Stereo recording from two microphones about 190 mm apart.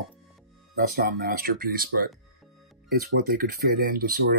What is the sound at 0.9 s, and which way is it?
Speech, 50° right (ahead or behind).